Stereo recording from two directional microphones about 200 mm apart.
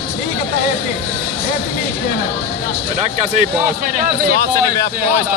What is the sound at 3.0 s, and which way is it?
Speech, 40° right (ahead or behind).